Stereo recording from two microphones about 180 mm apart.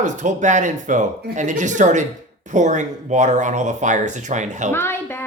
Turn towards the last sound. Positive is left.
turn(degrees=15)  # may be behind; listen again after turning